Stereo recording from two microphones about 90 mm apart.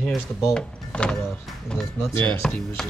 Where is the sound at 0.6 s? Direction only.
10° left (ahead or behind).